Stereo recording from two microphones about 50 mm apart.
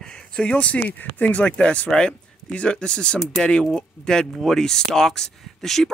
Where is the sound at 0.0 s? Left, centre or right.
Centre.